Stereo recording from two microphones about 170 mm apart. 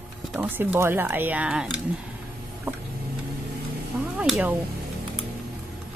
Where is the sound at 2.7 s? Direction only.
15° right (ahead or behind).